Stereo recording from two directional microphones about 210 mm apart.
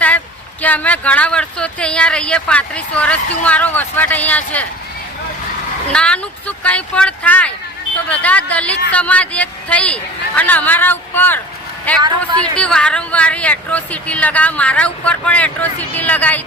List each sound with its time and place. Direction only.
0.6 s speech: 5° left (ahead or behind)
5.9 s speech: 5° left (ahead or behind)